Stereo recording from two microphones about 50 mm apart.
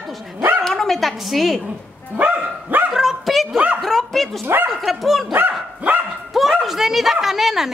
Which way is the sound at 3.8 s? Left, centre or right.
Centre.